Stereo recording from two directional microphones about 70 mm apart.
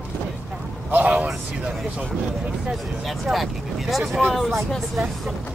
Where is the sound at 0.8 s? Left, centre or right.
Right.